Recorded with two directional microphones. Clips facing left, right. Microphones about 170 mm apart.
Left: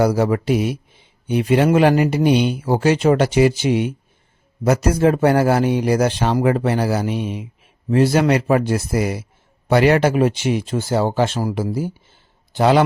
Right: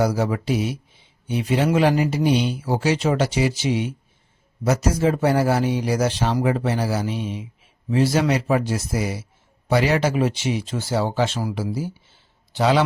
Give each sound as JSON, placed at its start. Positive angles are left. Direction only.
{"t": 0.0, "sound": "speech", "side_deg": 60}